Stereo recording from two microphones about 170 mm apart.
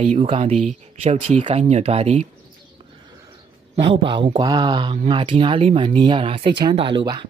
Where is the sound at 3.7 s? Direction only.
30° right (ahead or behind).